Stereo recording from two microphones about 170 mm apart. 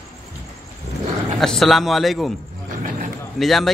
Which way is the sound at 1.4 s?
Centre (ahead or behind).